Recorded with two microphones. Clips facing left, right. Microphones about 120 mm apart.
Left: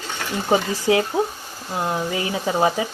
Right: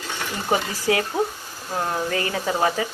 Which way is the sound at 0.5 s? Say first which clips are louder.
Left 4 dB; 20° left (ahead or behind).